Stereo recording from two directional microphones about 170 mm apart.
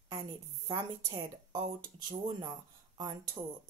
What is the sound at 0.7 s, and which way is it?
Speech, 25° right (ahead or behind).